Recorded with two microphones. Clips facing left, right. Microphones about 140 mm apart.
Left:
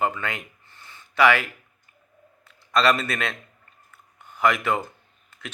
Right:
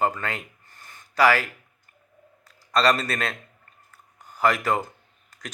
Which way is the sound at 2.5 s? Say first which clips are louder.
Even; 35° right (ahead or behind).